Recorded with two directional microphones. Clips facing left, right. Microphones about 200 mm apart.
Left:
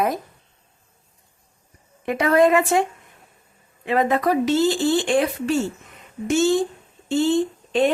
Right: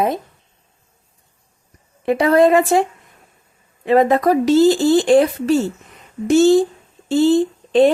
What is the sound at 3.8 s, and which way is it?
A woman's voice, 40° right (ahead or behind).